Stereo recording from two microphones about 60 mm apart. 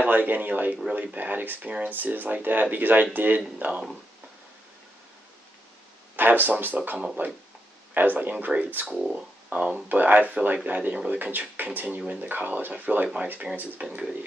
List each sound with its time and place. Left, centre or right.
0.0 s speech: right
6.1 s speech: right
8.8 s speech: centre